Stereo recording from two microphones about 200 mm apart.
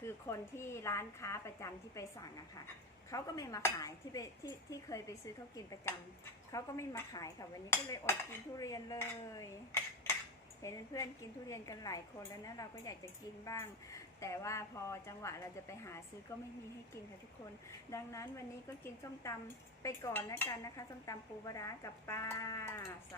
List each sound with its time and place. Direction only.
0.0 s dishes: 15° left (ahead or behind)
3.1 s dishes: 15° left (ahead or behind)
17.7 s dishes: 15° left (ahead or behind)
19.8 s dishes: 15° left (ahead or behind)